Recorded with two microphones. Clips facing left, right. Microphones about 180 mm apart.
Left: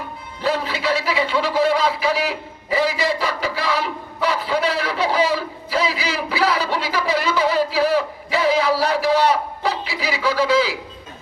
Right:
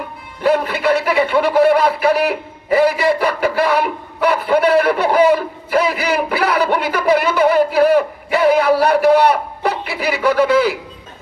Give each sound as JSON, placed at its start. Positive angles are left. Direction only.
{"t": 0.4, "sound": "a man's voice", "side_deg": -55}